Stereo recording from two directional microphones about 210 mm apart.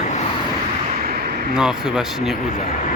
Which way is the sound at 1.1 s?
45° right (ahead or behind).